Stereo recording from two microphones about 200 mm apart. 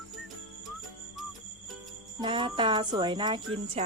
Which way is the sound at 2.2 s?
25° right (ahead or behind).